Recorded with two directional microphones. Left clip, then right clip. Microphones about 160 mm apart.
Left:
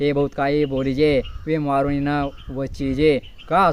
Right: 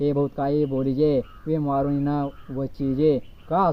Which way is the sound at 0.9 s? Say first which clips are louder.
Left 4 dB; 50° left (ahead or behind).